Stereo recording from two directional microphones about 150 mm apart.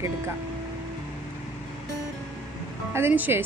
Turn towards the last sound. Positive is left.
turn(degrees=-15)  # may be behind; listen again after turning